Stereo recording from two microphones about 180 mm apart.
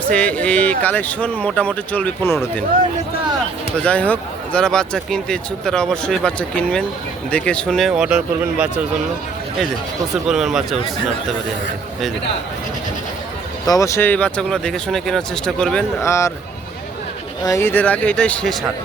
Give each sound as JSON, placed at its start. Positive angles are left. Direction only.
{"t": 0.0, "sound": "speech", "side_deg": 5}
{"t": 3.8, "sound": "speech", "side_deg": 5}
{"t": 10.2, "sound": "speech", "side_deg": 0}
{"t": 13.7, "sound": "speech", "side_deg": 20}
{"t": 16.0, "sound": "speech", "side_deg": 15}
{"t": 17.4, "sound": "speech", "side_deg": 15}